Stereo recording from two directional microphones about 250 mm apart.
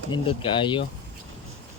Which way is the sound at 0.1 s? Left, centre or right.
Centre.